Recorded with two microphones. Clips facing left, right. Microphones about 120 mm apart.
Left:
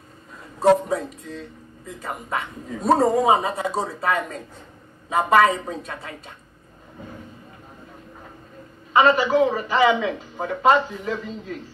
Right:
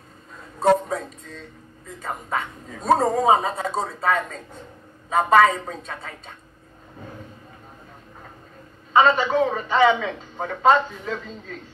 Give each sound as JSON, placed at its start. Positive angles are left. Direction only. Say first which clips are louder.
{"t": 0.6, "sound": "a sound", "louder": "left 2 dB", "side_deg": 5}
{"t": 2.0, "sound": "speech", "louder": "right 1 dB", "side_deg": 5}
{"t": 8.9, "sound": "speech", "louder": "left 1 dB", "side_deg": 5}